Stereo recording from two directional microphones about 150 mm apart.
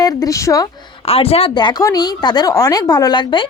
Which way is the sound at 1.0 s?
40° left (ahead or behind).